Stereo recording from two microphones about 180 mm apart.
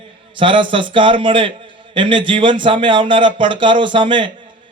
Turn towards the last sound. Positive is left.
turn(degrees=-25)  # may be behind; listen again after turning